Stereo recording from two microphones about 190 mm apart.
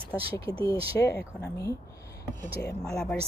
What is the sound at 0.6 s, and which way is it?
Speech, 15° left (ahead or behind).